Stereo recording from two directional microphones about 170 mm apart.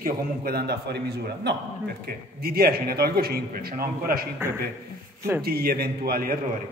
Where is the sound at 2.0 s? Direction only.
65° right (ahead or behind).